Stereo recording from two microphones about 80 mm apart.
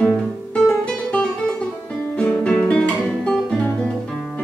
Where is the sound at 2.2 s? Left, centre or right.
Centre.